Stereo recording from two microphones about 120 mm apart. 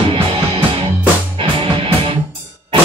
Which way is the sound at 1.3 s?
50° right (ahead or behind).